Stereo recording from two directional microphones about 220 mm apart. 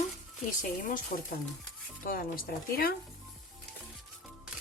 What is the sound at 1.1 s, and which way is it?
Speech, 35° left (ahead or behind).